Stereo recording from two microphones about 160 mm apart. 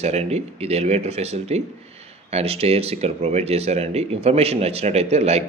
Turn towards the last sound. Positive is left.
turn(degrees=-40)  # may be behind; listen again after turning